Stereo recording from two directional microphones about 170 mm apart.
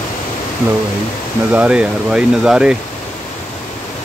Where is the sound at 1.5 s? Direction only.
5° right (ahead or behind).